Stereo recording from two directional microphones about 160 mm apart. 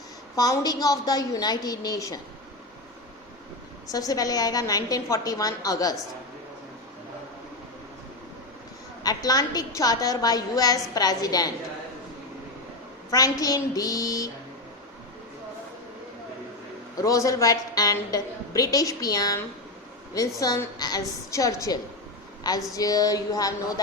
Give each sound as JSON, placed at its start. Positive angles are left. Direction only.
{"t": 0.3, "sound": "a woman's voice", "side_deg": 25}
{"t": 3.8, "sound": "a woman's voice", "side_deg": 25}
{"t": 9.0, "sound": "a woman's voice", "side_deg": 25}
{"t": 13.1, "sound": "a woman's voice", "side_deg": 20}
{"t": 17.0, "sound": "a woman's voice", "side_deg": 20}